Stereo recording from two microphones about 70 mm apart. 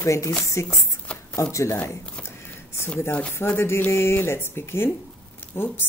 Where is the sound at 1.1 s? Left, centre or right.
Centre.